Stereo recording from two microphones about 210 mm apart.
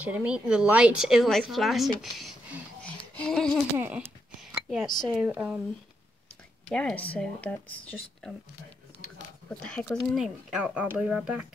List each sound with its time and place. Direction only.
0.0 s speech: 5° right (ahead or behind)
3.7 s speech: 5° right (ahead or behind)
6.7 s speech: 5° left (ahead or behind)
9.5 s speech: 5° left (ahead or behind)